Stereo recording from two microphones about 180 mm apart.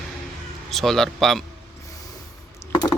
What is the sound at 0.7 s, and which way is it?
Speech, centre (ahead or behind).